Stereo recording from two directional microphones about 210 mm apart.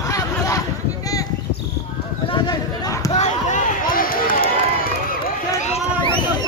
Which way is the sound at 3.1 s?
35° left (ahead or behind).